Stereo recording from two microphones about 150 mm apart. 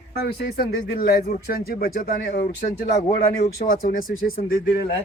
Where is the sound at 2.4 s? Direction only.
80° left.